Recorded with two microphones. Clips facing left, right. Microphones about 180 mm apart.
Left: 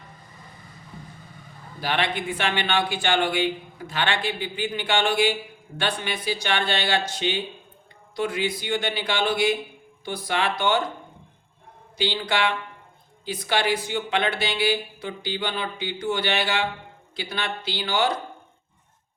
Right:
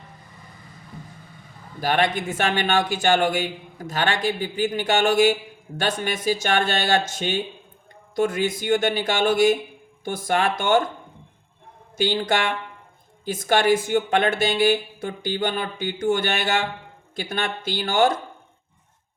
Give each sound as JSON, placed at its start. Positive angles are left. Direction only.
{"t": 1.8, "sound": "a man's voice", "side_deg": -45}
{"t": 11.9, "sound": "a man's voice", "side_deg": -45}